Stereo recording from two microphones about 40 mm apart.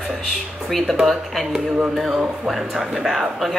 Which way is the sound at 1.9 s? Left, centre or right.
Centre.